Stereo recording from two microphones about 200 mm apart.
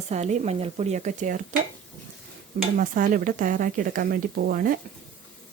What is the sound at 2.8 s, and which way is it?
Speech, 40° right (ahead or behind).